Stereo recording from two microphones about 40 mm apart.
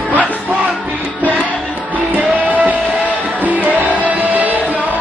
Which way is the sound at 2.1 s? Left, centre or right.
Right.